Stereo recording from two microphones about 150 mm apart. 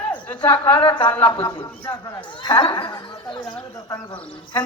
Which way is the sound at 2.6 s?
30° left (ahead or behind).